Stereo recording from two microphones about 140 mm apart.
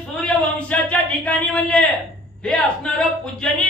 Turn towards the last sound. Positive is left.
turn(degrees=5)  # may be behind; listen again after turning